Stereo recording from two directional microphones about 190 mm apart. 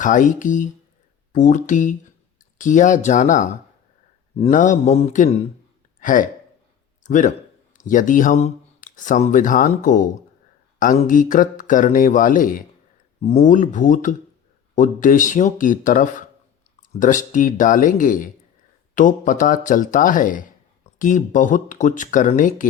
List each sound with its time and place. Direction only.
0.0 s speech: 40° left (ahead or behind)